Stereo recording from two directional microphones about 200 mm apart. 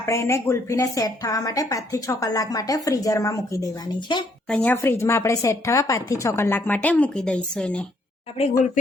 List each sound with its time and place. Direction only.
0.0 s a woman's voice: 15° left (ahead or behind)